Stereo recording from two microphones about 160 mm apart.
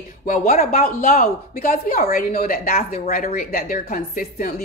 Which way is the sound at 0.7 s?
65° left (ahead or behind).